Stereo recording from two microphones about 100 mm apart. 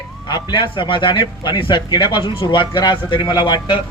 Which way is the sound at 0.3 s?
45° left (ahead or behind).